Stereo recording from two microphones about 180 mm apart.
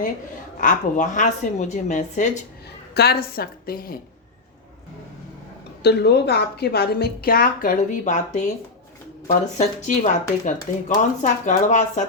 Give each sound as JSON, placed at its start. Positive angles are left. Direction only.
{"t": 0.6, "sound": "a woman's voice", "side_deg": 45}
{"t": 2.9, "sound": "a woman's voice", "side_deg": 65}
{"t": 5.8, "sound": "a woman's voice", "side_deg": 65}